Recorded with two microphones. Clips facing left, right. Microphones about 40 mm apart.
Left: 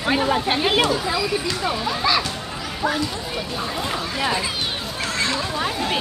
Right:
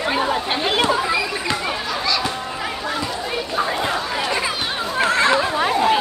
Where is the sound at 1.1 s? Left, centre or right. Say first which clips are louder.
Right 1 dB; right.